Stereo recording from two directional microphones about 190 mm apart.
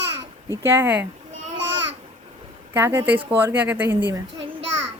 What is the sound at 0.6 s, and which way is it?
Speech, 10° right (ahead or behind).